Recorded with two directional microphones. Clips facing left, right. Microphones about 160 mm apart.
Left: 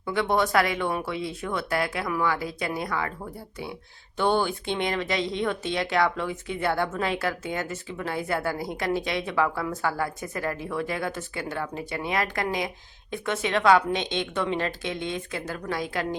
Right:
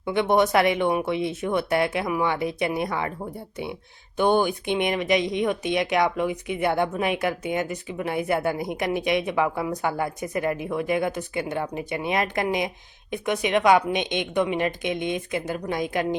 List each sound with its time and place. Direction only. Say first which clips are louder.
0.0 s speech: right 4 dB; 20° right (ahead or behind)
4.2 s speech: right 3 dB; 15° right (ahead or behind)